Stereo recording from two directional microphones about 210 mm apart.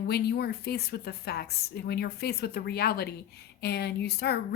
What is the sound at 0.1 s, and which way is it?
A woman's voice, 50° left (ahead or behind).